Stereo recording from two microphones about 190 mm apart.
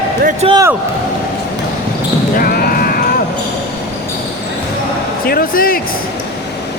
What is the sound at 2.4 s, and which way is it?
Basketball bounce, 50° left (ahead or behind).